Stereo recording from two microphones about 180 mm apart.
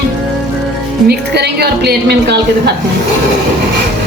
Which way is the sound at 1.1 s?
65° right (ahead or behind).